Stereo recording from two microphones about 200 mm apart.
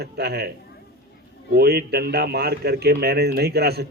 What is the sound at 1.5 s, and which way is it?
Speech, 55° right (ahead or behind).